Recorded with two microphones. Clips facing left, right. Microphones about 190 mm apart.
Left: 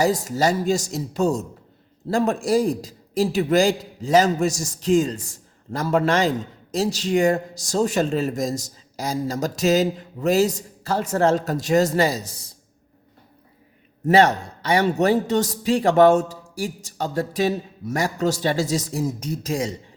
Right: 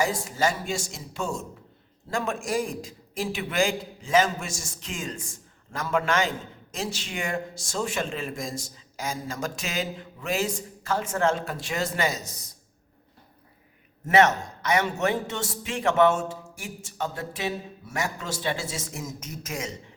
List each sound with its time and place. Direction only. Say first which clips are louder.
0.0 s a man's voice: left 6 dB; 40° left (ahead or behind)
14.1 s a man's voice: left 4 dB; 35° left (ahead or behind)